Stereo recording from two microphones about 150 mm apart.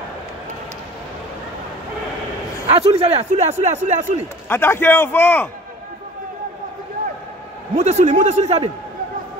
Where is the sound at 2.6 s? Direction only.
45° right (ahead or behind).